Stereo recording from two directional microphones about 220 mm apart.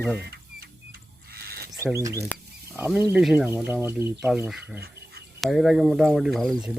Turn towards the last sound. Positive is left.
turn(degrees=0)  # may be behind; listen again after turning